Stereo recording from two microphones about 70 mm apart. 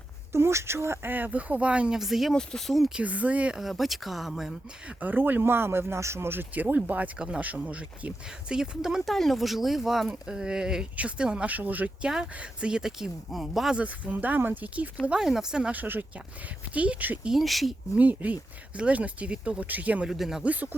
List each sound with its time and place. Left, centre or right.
0.3 s speech: right; by 2.0 s centre
2.0 s speech: centre
2.3 s speech: centre
2.9 s speech: right
3.6 s speech: centre
4.9 s speech: right
12.0 s speech: centre
13.7 s speech: right
15.0 s speech: centre
15.7 s speech: right
17.2 s speech: centre
17.9 s speech: right
20.1 s speech: centre
20.4 s speech: right